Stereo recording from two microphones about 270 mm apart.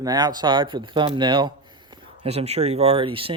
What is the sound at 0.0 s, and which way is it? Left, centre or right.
Speech, centre.